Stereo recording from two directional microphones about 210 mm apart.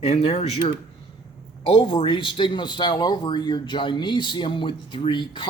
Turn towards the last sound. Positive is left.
turn(degrees=20)  # may be behind; listen again after turning